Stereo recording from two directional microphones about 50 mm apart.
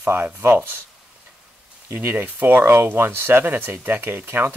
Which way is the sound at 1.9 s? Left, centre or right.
Right.